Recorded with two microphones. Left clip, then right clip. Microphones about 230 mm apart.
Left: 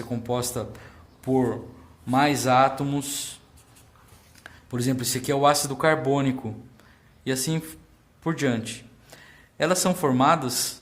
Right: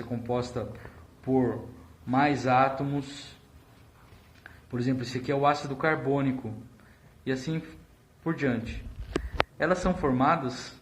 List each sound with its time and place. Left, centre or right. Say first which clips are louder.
0.0 s speech: left 3 dB; left
4.4 s speech: left 3 dB; left